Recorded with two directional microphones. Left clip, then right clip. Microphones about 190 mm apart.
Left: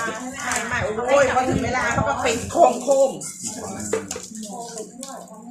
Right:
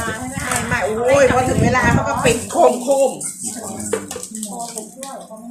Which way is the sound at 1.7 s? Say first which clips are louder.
Right 5 dB; 55° right (ahead or behind).